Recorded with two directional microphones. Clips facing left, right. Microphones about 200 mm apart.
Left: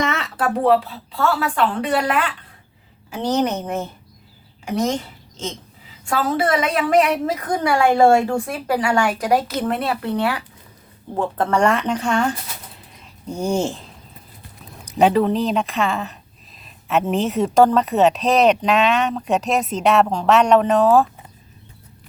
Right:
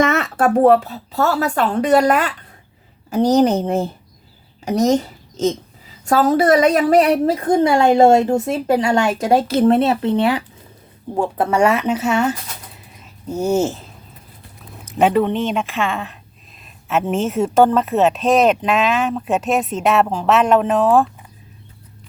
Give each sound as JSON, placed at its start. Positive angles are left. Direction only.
{"t": 0.0, "sound": "a woman's voice", "side_deg": -50}
{"t": 6.1, "sound": "a woman's voice", "side_deg": -40}
{"t": 11.2, "sound": "a woman's voice", "side_deg": -10}
{"t": 14.9, "sound": "a woman's voice", "side_deg": 0}